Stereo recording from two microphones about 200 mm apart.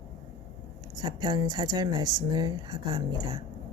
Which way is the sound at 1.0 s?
20° right (ahead or behind).